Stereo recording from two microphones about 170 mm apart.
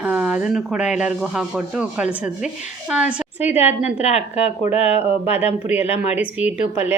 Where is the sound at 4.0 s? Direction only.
40° left (ahead or behind).